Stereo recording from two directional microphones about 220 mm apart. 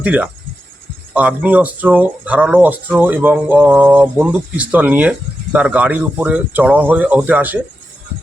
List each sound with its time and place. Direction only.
0.0 s insect: 5° right (ahead or behind)
1.1 s speech: 5° right (ahead or behind)